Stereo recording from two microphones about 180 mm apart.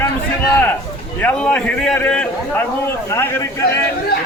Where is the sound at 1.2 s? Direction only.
5° left (ahead or behind).